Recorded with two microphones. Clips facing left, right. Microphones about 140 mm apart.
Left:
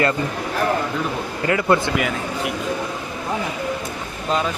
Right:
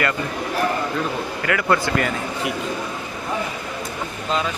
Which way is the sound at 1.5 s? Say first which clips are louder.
Left 3 dB; 25° left (ahead or behind).